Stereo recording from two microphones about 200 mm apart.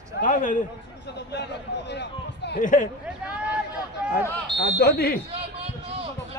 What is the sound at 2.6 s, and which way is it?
Speech, 40° left (ahead or behind).